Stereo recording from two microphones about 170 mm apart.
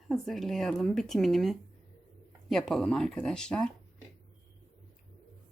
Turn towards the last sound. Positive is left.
turn(degrees=5)  # may be behind; listen again after turning